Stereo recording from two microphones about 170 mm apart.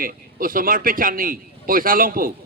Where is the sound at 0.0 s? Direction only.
55° right (ahead or behind).